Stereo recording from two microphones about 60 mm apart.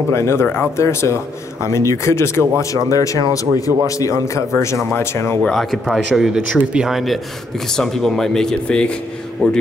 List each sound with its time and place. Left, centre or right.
0.1 s speech: left
0.8 s speech: left
2.6 s speech: left
5.4 s speech: centre